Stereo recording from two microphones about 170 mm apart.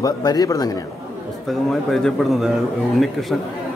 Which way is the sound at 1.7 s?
Centre (ahead or behind).